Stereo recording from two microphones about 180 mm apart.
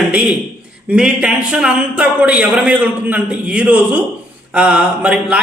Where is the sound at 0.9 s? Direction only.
5° right (ahead or behind).